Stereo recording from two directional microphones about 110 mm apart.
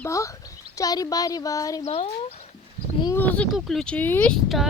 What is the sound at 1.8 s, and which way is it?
Speech, 65° left (ahead or behind).